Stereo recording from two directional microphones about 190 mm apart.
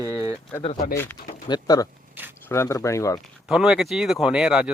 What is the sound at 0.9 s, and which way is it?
Speech, 10° left (ahead or behind).